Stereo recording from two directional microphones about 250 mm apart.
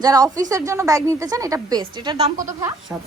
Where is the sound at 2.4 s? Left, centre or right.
Centre.